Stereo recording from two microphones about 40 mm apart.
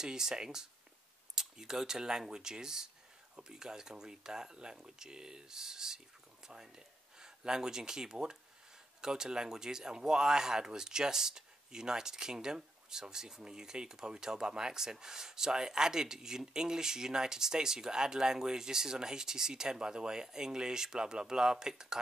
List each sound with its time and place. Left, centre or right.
0.0 s speech: centre